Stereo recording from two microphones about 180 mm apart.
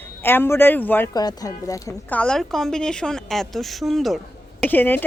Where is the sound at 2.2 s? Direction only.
Centre (ahead or behind).